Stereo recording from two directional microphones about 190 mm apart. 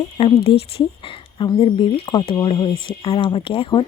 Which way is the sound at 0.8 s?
25° left (ahead or behind).